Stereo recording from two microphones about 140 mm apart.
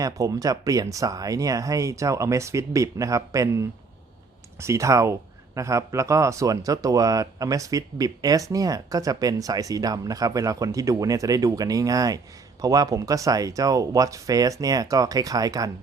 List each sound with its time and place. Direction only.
0.0 s speech: 25° right (ahead or behind)